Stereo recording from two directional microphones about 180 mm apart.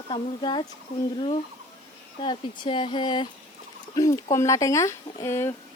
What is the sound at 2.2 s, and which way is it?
Speech, 25° left (ahead or behind).